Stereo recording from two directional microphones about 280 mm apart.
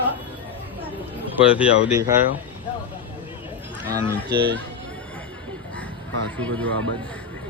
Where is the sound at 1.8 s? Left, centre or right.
Centre.